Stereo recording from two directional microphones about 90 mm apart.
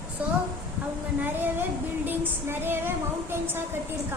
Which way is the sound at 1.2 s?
25° right (ahead or behind).